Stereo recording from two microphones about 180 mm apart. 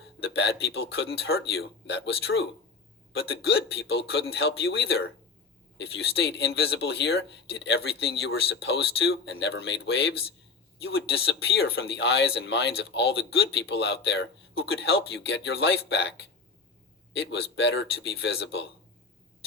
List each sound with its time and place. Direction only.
0.3 s speech: 65° left (ahead or behind)
17.2 s speech: 70° left (ahead or behind)